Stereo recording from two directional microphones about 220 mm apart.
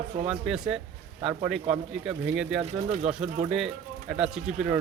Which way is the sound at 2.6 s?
30° right (ahead or behind).